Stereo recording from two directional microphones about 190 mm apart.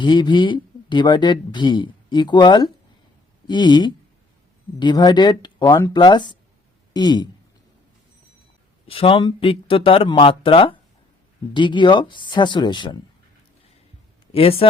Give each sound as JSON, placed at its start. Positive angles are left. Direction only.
{"t": 0.0, "sound": "speech", "side_deg": 25}
{"t": 8.9, "sound": "speech", "side_deg": 30}
{"t": 14.3, "sound": "speech", "side_deg": 30}